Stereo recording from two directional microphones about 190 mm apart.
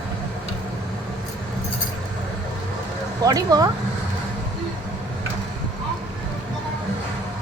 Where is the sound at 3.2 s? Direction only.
20° right (ahead or behind).